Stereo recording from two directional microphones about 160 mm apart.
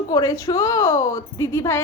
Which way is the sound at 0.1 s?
20° left (ahead or behind).